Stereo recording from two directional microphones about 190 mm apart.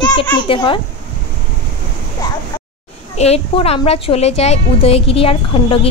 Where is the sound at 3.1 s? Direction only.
35° left (ahead or behind).